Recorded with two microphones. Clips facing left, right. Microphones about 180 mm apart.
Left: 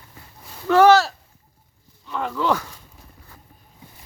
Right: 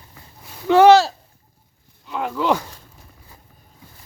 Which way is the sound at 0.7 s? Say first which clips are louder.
Right 3 dB; 25° right (ahead or behind).